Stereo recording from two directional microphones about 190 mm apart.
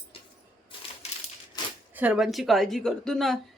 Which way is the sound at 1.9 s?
5° right (ahead or behind).